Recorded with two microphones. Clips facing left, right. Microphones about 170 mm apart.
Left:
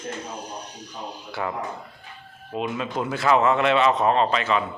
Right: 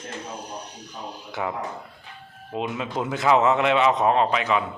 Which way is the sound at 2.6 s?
20° right (ahead or behind).